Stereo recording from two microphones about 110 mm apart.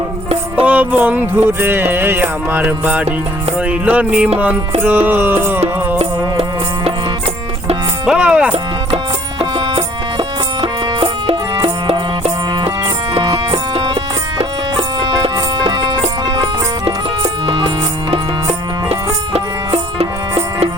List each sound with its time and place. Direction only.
0.5 s music: 15° right (ahead or behind)
8.0 s music: 10° right (ahead or behind)
9.4 s music: 55° right (ahead or behind)
11.6 s music: 65° right (ahead or behind)
12.5 s music: 45° right (ahead or behind)
13.3 s music: 65° right (ahead or behind)
15.6 s music: 40° right (ahead or behind)
18.9 s music: 65° right (ahead or behind)